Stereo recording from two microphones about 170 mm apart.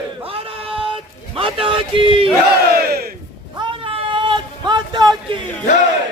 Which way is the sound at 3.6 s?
30° right (ahead or behind).